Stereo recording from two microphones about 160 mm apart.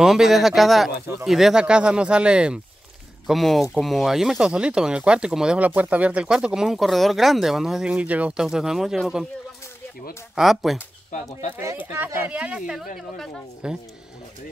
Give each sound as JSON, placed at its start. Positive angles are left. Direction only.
{"t": 0.0, "sound": "speech", "side_deg": 0}
{"t": 10.3, "sound": "speech", "side_deg": 0}
{"t": 11.1, "sound": "speech", "side_deg": 50}
{"t": 11.5, "sound": "speech", "side_deg": -10}